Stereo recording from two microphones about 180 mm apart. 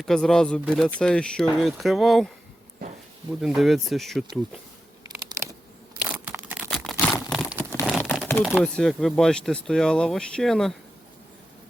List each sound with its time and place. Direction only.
0.0 s speech: centre (ahead or behind)
0.6 s speech: 10° right (ahead or behind)
0.9 s speech: 5° left (ahead or behind)
3.4 s speech: centre (ahead or behind)
5.0 s a sound: 20° right (ahead or behind)
6.2 s a sound: 5° right (ahead or behind)
8.4 s speech: centre (ahead or behind)